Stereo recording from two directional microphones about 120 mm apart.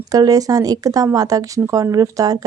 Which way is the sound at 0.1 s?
30° right (ahead or behind).